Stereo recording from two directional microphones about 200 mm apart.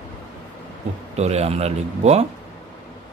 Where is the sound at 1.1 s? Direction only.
30° right (ahead or behind).